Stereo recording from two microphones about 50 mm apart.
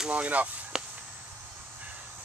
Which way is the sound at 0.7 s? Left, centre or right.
Centre.